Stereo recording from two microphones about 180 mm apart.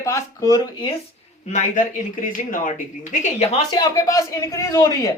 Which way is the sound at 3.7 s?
20° left (ahead or behind).